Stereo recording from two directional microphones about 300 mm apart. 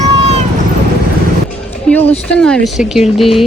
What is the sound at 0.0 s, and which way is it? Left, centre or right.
Vehicle, right.